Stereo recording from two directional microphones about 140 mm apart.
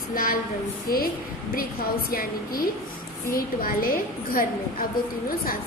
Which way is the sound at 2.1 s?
90° left.